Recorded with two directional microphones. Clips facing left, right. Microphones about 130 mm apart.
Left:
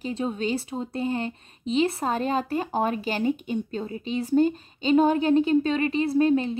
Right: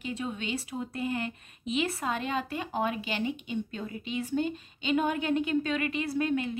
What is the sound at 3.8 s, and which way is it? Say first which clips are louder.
Speech: left 5 dB; 30° left (ahead or behind).